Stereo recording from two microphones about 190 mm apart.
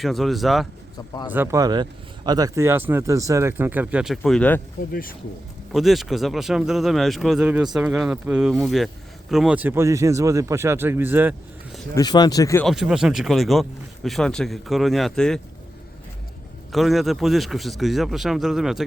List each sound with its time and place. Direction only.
0.0 s speech: centre (ahead or behind)
1.3 s speech: 10° right (ahead or behind); by 4.6 s 5° left (ahead or behind)
4.9 s speech: 50° left (ahead or behind)
5.7 s speech: centre (ahead or behind)
11.9 s speech: 20° left (ahead or behind)
12.6 s speech: centre (ahead or behind)
16.7 s speech: centre (ahead or behind)